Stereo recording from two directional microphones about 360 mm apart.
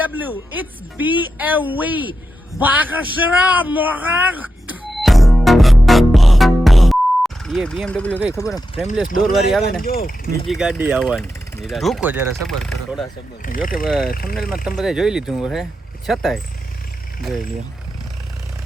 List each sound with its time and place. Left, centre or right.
0.3 s speech: centre
4.9 s music: centre
9.0 s speech: left
9.3 s speech: centre
9.7 s speech: left
10.5 s speech: centre
13.4 s speech: left
13.8 s speech: centre
14.1 s speech: left
14.5 s speech: centre